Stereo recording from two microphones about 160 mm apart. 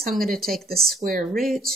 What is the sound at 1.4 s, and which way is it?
Speech, centre (ahead or behind).